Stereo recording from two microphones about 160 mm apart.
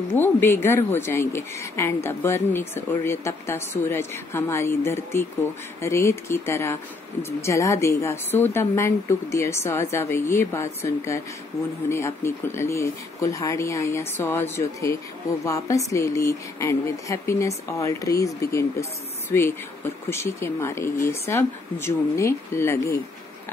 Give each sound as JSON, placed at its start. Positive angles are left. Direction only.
{"t": 0.1, "sound": "speech", "side_deg": 15}